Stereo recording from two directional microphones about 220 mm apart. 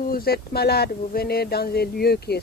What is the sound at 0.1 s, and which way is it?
Speech, 45° left (ahead or behind).